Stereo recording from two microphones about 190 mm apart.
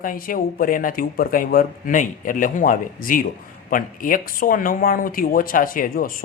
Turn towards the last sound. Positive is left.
turn(degrees=45)  # may be behind; listen again after turning